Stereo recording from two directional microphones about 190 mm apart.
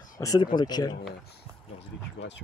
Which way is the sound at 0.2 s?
20° left (ahead or behind).